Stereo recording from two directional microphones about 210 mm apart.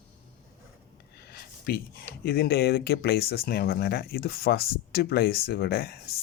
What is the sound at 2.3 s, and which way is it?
Speech, 50° left (ahead or behind).